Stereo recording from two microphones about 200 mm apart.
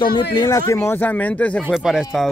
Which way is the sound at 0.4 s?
15° left (ahead or behind).